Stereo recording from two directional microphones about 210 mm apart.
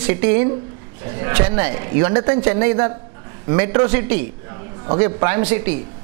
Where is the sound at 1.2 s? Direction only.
15° right (ahead or behind).